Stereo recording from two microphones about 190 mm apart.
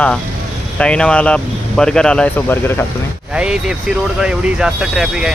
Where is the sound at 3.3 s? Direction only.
5° right (ahead or behind).